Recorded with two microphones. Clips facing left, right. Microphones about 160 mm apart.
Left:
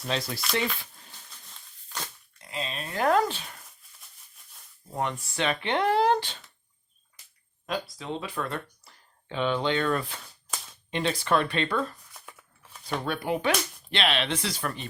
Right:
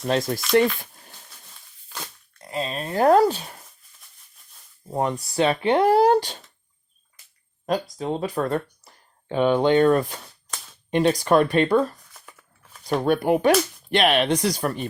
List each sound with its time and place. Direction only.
0.0 s speech: 50° right (ahead or behind)
2.4 s speech: 40° right (ahead or behind)
4.9 s speech: 35° right (ahead or behind)
7.7 s speech: 45° right (ahead or behind)
12.1 s a sound: centre (ahead or behind)
12.9 s speech: 45° right (ahead or behind)